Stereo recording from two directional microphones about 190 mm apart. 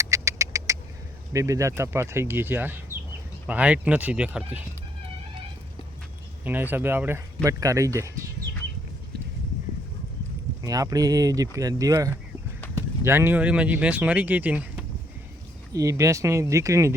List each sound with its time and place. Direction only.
0.0 s a sound: 15° right (ahead or behind)
1.3 s speech: 15° right (ahead or behind)
6.4 s speech: 10° right (ahead or behind)
10.6 s speech: 20° right (ahead or behind)